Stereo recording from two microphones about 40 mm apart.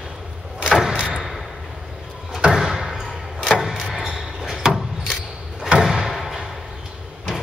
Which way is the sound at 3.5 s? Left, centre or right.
Centre.